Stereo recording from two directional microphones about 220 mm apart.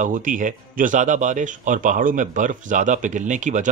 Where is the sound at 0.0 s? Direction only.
35° right (ahead or behind).